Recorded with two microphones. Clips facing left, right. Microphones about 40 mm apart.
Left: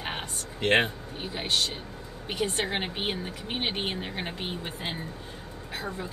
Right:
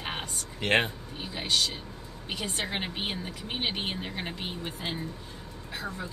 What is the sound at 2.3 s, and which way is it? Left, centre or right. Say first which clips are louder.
Speech: left 5 dB; left.